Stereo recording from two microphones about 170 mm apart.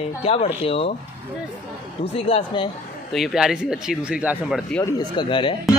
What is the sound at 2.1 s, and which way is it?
Speech, 35° left (ahead or behind).